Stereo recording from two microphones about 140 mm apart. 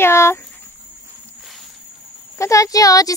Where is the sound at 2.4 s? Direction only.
25° left (ahead or behind).